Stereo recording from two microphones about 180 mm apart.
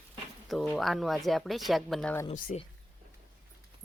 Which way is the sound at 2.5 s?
40° left (ahead or behind).